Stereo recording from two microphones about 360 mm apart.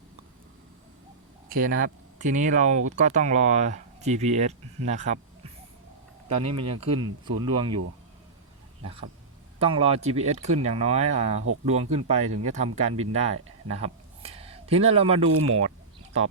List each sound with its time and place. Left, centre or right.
1.5 s speech: right
9.6 s speech: centre
13.7 s a sound: centre
15.3 s speech: right